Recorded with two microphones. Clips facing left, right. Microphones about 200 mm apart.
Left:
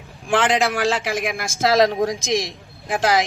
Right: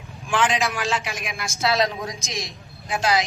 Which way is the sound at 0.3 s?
65° left (ahead or behind).